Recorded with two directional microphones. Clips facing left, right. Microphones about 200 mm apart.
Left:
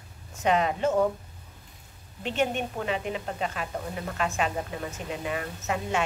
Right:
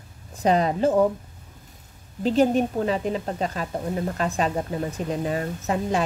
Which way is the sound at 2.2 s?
35° right (ahead or behind).